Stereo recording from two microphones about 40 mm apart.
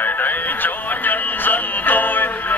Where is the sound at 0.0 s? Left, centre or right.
Left.